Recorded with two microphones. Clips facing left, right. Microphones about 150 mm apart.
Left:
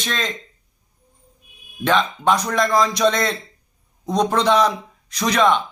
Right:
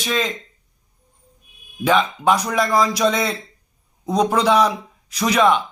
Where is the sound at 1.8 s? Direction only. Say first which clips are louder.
Right 1 dB; 5° right (ahead or behind).